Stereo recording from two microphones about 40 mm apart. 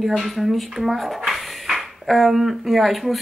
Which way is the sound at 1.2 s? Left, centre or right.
Centre.